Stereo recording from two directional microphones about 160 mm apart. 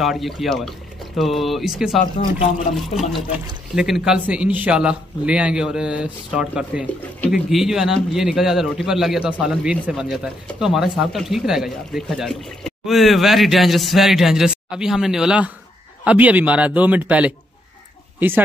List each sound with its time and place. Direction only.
0.0 s speech: centre (ahead or behind)
2.2 s speech: 40° left (ahead or behind)
2.7 s a man's voice: centre (ahead or behind)